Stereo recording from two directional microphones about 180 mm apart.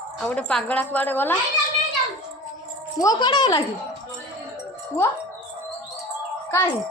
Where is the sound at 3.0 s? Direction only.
25° left (ahead or behind).